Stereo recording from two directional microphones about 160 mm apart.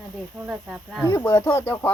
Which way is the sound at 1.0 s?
20° left (ahead or behind).